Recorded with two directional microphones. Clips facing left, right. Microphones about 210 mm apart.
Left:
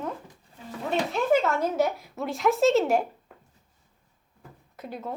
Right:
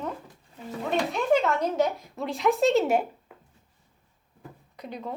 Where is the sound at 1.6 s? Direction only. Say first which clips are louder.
Even; 5° left (ahead or behind).